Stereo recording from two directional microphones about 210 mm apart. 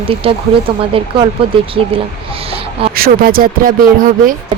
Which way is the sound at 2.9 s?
45° right (ahead or behind).